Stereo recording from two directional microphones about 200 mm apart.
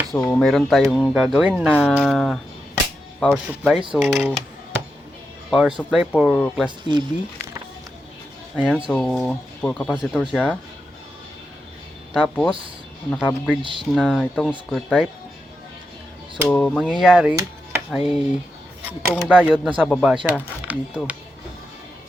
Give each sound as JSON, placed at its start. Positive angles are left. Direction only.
{"t": 0.2, "sound": "speech", "side_deg": 5}
{"t": 1.8, "sound": "speech", "side_deg": 5}
{"t": 6.7, "sound": "speech", "side_deg": -25}
{"t": 8.5, "sound": "speech", "side_deg": 0}
{"t": 12.1, "sound": "speech", "side_deg": 5}
{"t": 13.6, "sound": "speech", "side_deg": -25}
{"t": 13.9, "sound": "speech", "side_deg": 0}
{"t": 16.5, "sound": "speech", "side_deg": 5}